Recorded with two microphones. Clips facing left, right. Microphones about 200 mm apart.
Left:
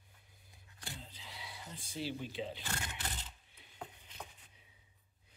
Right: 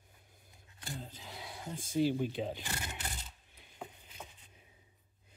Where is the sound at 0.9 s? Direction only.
50° right (ahead or behind).